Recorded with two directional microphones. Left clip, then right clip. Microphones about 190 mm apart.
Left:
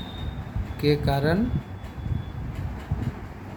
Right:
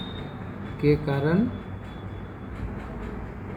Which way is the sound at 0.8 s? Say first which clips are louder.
Even; 45° left (ahead or behind).